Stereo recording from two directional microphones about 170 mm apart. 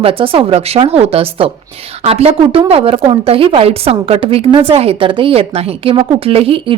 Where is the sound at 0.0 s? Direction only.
30° right (ahead or behind).